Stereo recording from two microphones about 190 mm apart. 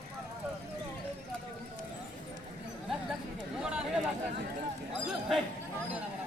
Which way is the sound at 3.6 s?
5° right (ahead or behind).